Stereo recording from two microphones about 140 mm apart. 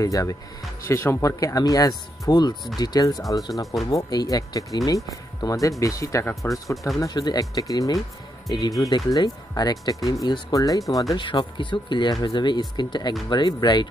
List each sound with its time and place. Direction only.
0.0 s speech: 25° left (ahead or behind)